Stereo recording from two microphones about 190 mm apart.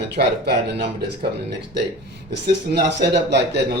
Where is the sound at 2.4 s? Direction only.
60° right (ahead or behind).